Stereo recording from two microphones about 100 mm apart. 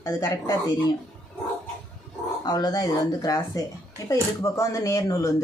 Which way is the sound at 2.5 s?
40° left (ahead or behind).